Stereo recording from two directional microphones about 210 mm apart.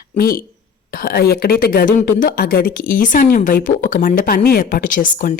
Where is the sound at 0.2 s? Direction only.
45° left (ahead or behind).